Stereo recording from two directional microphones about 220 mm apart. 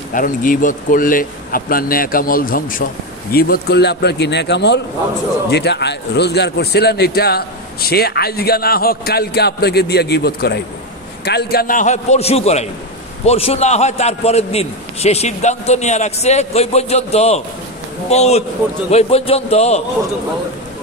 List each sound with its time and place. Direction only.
0.1 s a man's voice: 40° left (ahead or behind)